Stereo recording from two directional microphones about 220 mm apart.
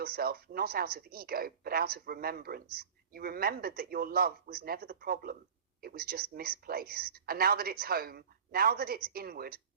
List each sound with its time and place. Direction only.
0.0 s speech: 45° right (ahead or behind)